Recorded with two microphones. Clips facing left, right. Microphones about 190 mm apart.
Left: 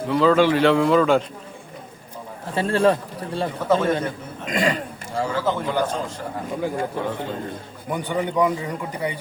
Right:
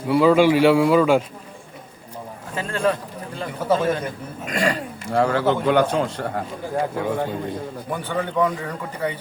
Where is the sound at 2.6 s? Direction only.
35° left (ahead or behind).